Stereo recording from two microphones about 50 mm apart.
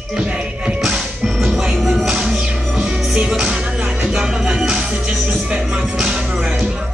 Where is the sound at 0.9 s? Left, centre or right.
Centre.